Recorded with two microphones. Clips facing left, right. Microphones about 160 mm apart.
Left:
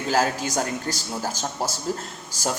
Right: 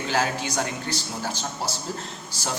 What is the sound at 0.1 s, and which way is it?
Speech, 40° left (ahead or behind).